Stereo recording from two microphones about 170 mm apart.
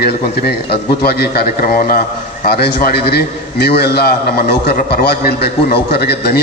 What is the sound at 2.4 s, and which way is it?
A man's voice, 65° left (ahead or behind).